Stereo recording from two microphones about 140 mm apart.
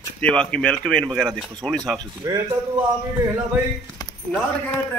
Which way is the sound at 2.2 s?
25° right (ahead or behind).